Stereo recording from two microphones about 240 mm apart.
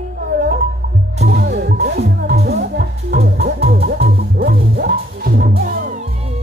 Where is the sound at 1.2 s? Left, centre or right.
Right.